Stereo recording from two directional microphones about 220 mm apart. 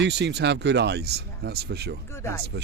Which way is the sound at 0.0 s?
50° right (ahead or behind).